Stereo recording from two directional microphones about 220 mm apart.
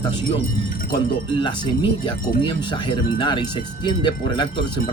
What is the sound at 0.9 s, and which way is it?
Speech, 20° left (ahead or behind).